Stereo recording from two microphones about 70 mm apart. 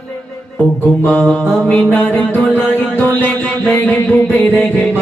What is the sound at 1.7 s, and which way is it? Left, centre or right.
Music, left.